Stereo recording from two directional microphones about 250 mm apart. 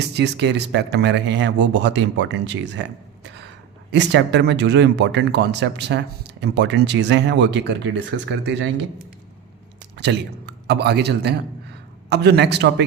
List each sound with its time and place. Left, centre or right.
0.1 s speech: right
3.9 s speech: right
10.0 s a man's voice: right